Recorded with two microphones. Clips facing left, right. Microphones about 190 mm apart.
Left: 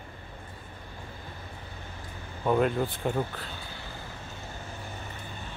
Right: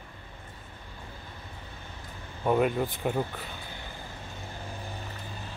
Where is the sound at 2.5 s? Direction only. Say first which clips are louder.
Even; 5° right (ahead or behind).